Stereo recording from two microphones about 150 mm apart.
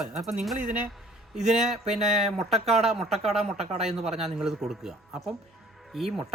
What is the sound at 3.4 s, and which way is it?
Speech, 45° right (ahead or behind).